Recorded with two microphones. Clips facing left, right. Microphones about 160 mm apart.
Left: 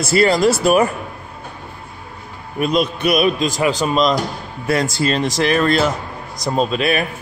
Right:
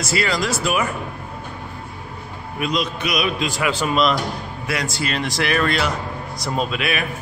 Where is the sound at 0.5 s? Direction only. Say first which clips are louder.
Left 8 dB; 40° left (ahead or behind).